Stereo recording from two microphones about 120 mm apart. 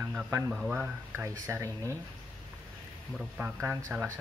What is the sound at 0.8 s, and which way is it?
Speech, 20° right (ahead or behind).